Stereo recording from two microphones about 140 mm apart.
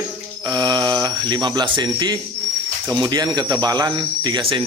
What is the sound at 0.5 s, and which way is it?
Speech, 30° right (ahead or behind).